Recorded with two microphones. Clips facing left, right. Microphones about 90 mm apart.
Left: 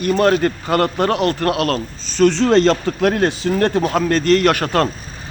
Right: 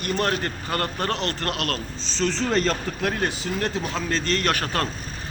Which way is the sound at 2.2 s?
70° left (ahead or behind).